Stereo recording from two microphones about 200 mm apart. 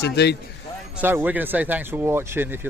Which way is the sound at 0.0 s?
55° left (ahead or behind).